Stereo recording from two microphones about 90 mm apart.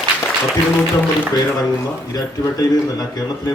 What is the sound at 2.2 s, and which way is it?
Speech, 45° left (ahead or behind).